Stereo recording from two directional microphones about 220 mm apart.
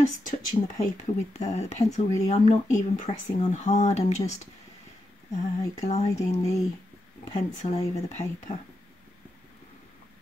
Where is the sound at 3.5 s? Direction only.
30° left (ahead or behind).